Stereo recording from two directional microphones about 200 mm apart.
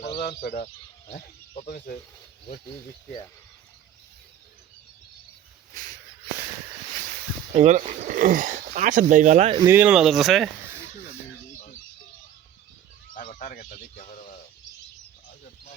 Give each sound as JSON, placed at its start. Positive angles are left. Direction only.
{"t": 0.0, "sound": "speech", "side_deg": 55}
{"t": 0.5, "sound": "speech", "side_deg": 35}
{"t": 7.5, "sound": "speech", "side_deg": -35}
{"t": 9.6, "sound": "speech", "side_deg": -10}
{"t": 13.1, "sound": "speech", "side_deg": 40}